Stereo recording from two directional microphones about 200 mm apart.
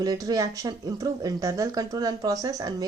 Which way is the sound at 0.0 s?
20° right (ahead or behind).